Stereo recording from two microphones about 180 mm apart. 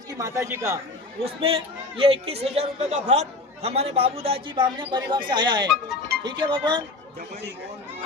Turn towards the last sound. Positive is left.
turn(degrees=-25)  # may be behind; listen again after turning